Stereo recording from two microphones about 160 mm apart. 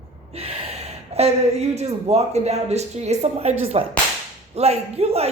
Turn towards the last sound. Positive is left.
turn(degrees=-40)  # may be behind; listen again after turning